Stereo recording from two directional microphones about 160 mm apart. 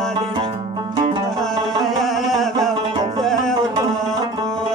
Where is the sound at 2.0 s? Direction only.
Centre (ahead or behind).